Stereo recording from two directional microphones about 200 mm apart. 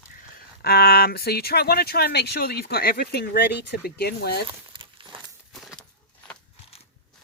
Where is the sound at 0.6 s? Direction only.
50° left (ahead or behind).